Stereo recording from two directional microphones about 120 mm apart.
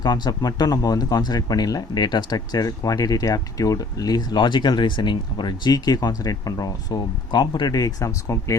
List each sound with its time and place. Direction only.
0.0 s speech: 35° left (ahead or behind)